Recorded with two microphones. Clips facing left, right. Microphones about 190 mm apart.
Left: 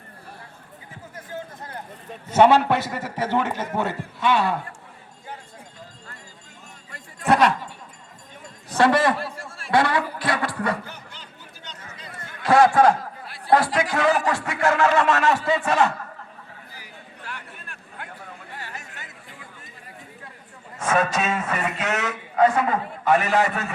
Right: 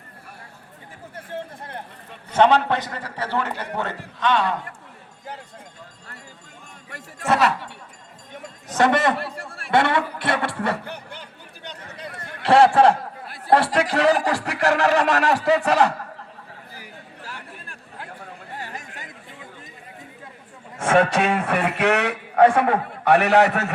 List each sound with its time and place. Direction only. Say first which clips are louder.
1.1 s a sound: right 2 dB; 30° right (ahead or behind)
2.4 s a man's voice: left 1 dB; 10° left (ahead or behind)
7.3 s speech: left 2 dB; 5° right (ahead or behind)
8.8 s speech: even; 20° right (ahead or behind)
9.1 s a man's voice: right 2 dB; 60° right (ahead or behind)
9.7 s speech: right 1 dB; 25° right (ahead or behind)
10.8 s a sound: right 5 dB; 60° right (ahead or behind)
12.2 s a sound: right 2 dB; 30° right (ahead or behind)
13.7 s speech: right 2 dB; 35° right (ahead or behind)
17.2 s chatter: left 1 dB; 30° right (ahead or behind)
21.0 s a man's voice: right 4 dB; 65° right (ahead or behind)